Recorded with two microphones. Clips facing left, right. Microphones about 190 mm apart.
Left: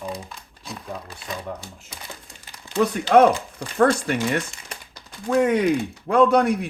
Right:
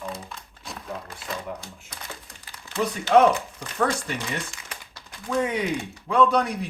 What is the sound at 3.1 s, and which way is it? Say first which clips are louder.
Speech: left 2 dB; 55° left (ahead or behind).